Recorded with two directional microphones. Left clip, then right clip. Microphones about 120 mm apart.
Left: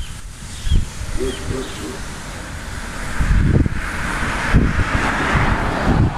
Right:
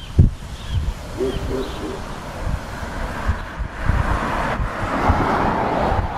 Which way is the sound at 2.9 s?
25° left (ahead or behind).